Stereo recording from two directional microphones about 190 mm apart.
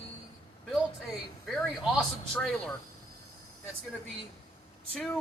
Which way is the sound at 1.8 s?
Centre (ahead or behind).